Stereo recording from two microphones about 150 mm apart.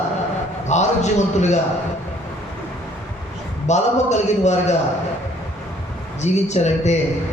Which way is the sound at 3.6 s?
50° left (ahead or behind).